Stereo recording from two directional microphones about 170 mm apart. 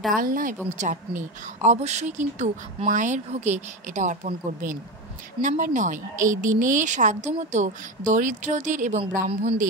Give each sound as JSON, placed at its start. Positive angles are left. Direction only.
{"t": 0.1, "sound": "a woman's voice", "side_deg": -55}